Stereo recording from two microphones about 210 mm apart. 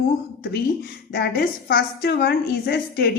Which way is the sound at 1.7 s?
45° left (ahead or behind).